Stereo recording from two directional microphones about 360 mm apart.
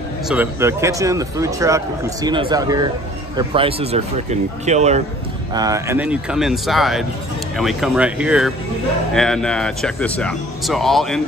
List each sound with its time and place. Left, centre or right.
0.3 s speech: centre